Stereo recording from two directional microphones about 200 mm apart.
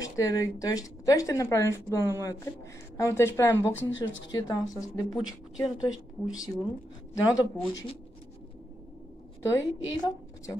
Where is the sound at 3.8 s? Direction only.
70° left (ahead or behind).